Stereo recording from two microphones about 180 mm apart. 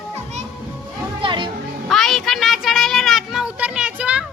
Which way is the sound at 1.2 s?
25° right (ahead or behind).